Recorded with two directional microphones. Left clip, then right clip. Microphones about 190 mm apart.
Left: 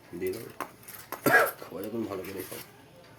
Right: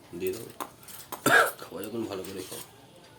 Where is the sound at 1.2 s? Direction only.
10° left (ahead or behind).